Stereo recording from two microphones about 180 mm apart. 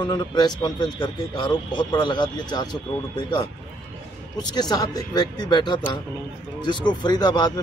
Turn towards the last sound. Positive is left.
turn(degrees=25)  # may be behind; listen again after turning